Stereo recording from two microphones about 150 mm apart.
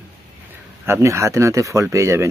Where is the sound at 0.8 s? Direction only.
20° right (ahead or behind).